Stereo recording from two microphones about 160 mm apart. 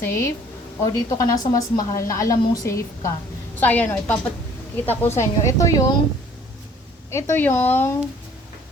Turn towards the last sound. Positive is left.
turn(degrees=10)  # may be behind; listen again after turning